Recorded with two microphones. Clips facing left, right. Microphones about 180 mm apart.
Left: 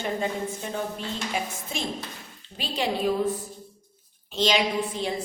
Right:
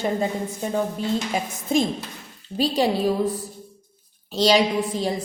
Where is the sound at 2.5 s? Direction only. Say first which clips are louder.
Right 7 dB; 40° right (ahead or behind).